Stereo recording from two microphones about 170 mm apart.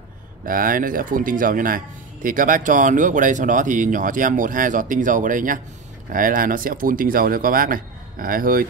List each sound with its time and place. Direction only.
0.5 s speech: 55° right (ahead or behind)